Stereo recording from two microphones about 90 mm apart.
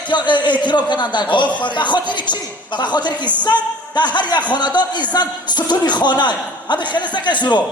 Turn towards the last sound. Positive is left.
turn(degrees=60)  # may be behind; listen again after turning